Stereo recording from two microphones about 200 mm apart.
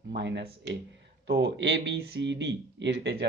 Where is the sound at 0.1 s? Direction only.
60° right (ahead or behind).